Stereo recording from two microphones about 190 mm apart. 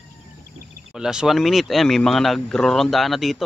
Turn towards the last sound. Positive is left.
turn(degrees=0)  # may be behind; listen again after turning